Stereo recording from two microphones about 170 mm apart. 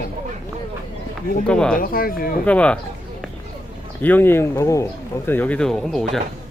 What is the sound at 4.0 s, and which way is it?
Speech, 10° left (ahead or behind).